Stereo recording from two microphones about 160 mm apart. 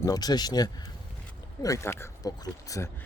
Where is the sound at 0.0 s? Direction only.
25° left (ahead or behind).